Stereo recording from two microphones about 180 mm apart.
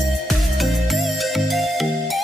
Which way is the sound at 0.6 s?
Centre (ahead or behind).